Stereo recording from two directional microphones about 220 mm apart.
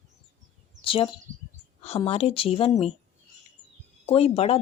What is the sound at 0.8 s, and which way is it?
A woman's voice, 25° left (ahead or behind).